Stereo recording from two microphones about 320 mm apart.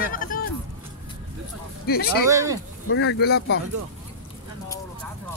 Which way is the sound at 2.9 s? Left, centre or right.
Left.